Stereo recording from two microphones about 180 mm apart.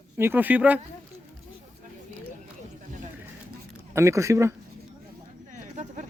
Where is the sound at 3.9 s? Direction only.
15° right (ahead or behind).